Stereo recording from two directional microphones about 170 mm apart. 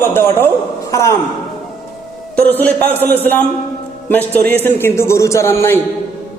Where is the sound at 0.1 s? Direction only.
15° left (ahead or behind).